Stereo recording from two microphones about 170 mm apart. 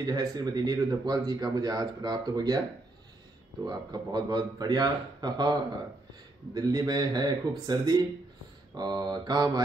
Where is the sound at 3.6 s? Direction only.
25° right (ahead or behind).